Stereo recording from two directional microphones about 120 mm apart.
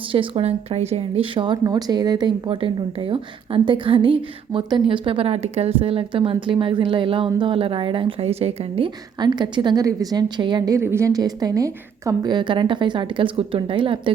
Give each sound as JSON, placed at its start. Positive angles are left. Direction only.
{"t": 0.1, "sound": "speech", "side_deg": -50}
{"t": 1.6, "sound": "speech", "side_deg": -35}
{"t": 9.2, "sound": "a woman's voice", "side_deg": -40}
{"t": 10.8, "sound": "a woman's voice", "side_deg": -25}